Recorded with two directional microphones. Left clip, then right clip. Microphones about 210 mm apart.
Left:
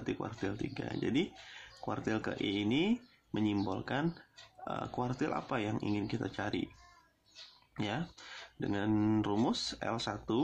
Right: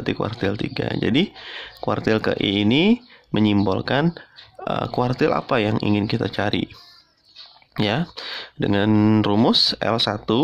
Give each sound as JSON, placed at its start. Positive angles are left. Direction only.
{"t": 0.0, "sound": "speech", "side_deg": -45}
{"t": 7.7, "sound": "speech", "side_deg": -45}